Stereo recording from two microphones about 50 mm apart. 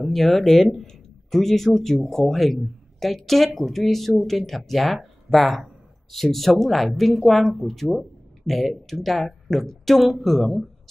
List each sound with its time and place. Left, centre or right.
0.0 s a woman's voice: centre